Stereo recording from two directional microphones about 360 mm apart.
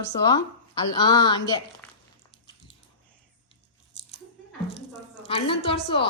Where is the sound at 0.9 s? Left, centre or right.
Centre.